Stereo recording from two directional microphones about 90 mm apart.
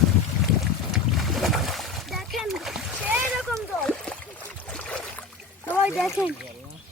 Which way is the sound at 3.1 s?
15° right (ahead or behind).